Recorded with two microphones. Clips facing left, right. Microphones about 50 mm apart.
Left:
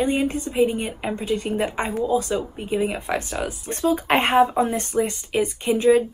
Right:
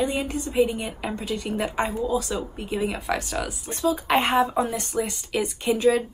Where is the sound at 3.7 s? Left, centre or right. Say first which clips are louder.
Left 2 dB; left.